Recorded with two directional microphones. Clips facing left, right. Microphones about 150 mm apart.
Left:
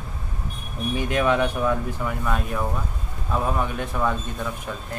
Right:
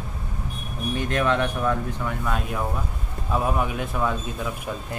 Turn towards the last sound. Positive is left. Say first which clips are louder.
# left 1 dB
turn(degrees=-5)  # may be behind; listen again after turning